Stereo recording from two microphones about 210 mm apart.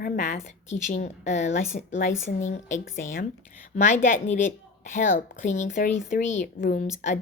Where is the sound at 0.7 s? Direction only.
35° left (ahead or behind).